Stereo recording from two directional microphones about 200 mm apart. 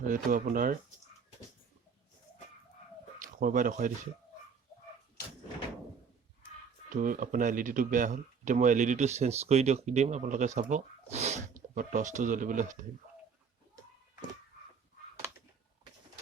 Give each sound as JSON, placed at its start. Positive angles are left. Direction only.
{"t": 0.0, "sound": "speech", "side_deg": -45}
{"t": 3.4, "sound": "speech", "side_deg": -40}
{"t": 6.9, "sound": "speech", "side_deg": -40}